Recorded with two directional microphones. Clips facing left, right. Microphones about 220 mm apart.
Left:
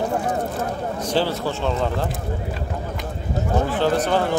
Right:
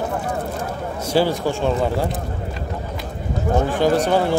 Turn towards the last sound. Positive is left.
turn(degrees=-10)  # may be behind; listen again after turning